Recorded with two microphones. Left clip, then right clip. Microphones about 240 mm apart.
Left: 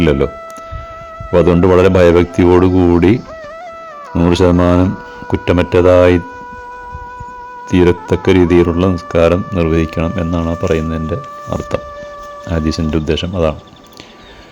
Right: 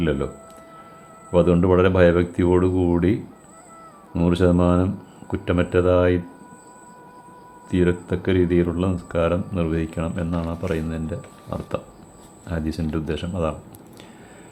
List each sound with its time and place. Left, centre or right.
0.0 s speech: left
1.3 s speech: left
7.7 s speech: left